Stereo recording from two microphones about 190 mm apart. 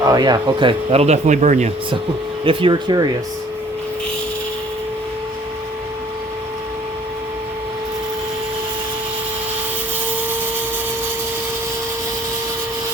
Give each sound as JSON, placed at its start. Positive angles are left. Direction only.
{"t": 0.0, "sound": "speech", "side_deg": -20}